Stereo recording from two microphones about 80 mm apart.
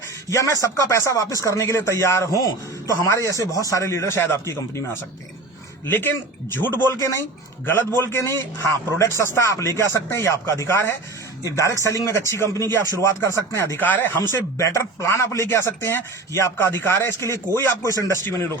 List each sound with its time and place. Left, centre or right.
0.3 s speech: left
5.8 s a man's voice: left
11.4 s speech: left
13.7 s a man's voice: left
14.6 s speech: left